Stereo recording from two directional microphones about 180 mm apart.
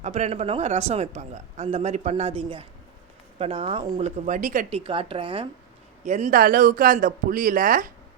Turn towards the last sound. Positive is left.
turn(degrees=-50)  # may be behind; listen again after turning